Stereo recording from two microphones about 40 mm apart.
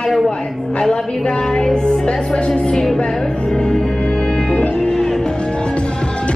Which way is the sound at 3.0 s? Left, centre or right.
Centre.